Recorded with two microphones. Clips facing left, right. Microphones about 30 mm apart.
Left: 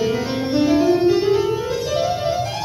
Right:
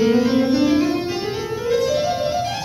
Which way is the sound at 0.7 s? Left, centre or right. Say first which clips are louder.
Left 3 dB; right.